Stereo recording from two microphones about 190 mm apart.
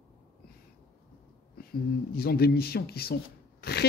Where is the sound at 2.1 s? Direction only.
55° left (ahead or behind).